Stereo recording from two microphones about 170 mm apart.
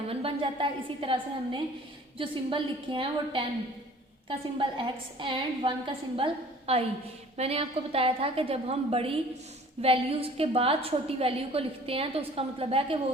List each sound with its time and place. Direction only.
0.1 s a woman's voice: 35° right (ahead or behind)